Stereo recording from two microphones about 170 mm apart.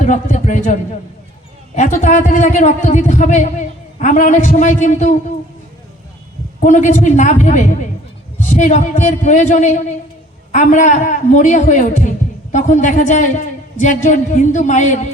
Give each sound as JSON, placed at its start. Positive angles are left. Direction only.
{"t": 0.0, "sound": "a man's voice", "side_deg": 45}
{"t": 6.6, "sound": "a man's voice", "side_deg": 45}